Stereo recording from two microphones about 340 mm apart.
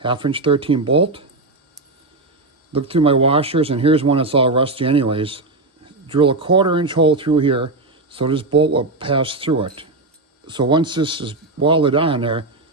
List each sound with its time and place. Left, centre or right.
0.0 s speech: centre
2.7 s speech: centre